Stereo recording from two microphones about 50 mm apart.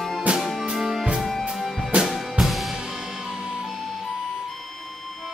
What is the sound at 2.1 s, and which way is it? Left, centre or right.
Music, centre.